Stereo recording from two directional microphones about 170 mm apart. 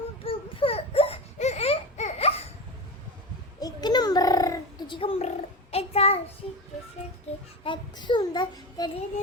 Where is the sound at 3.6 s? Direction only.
25° left (ahead or behind).